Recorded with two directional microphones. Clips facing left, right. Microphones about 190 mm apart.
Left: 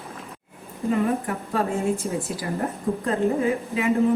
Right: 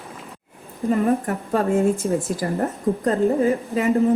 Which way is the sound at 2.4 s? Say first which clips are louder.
Right 4 dB; 45° right (ahead or behind).